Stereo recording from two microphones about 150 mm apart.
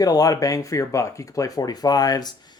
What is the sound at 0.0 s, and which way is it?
Speech, 25° left (ahead or behind).